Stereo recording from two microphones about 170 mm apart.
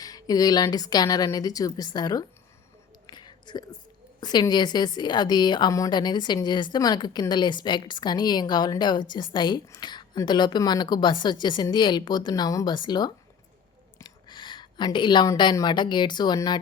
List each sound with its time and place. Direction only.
0.0 s a woman's voice: 20° left (ahead or behind)
3.1 s whispering: 25° left (ahead or behind)
4.2 s a woman's voice: 25° left (ahead or behind)